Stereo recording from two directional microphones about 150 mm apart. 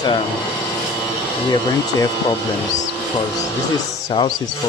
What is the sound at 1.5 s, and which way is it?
Speech, 30° left (ahead or behind).